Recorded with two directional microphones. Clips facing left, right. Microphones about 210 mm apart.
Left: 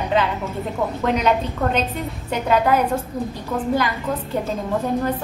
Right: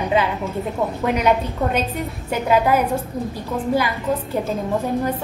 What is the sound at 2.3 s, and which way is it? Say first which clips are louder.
Speech: right 1 dB; 10° right (ahead or behind).